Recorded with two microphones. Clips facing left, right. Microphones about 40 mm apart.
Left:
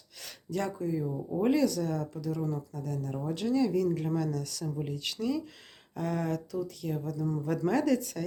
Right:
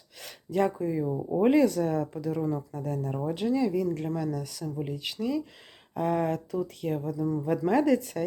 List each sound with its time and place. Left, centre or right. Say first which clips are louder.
0.5 s speech: right 5 dB; right
3.2 s speech: right 1 dB; centre
5.9 s speech: right 5 dB; right
6.6 s speech: right 4 dB; right
7.0 s speech: right 4 dB; right
7.3 s speech: right 3 dB; centre
7.9 s speech: right 3 dB; right